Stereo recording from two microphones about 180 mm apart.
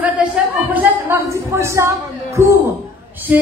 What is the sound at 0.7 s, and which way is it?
A woman's voice, 15° right (ahead or behind).